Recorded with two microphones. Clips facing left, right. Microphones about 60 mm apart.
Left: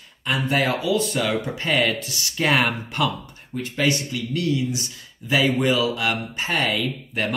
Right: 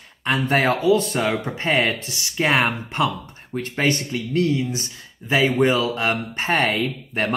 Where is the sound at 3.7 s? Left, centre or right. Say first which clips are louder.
Right 1 dB; right.